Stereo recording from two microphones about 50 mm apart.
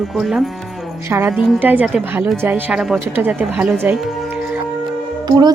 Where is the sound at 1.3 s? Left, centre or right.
Right.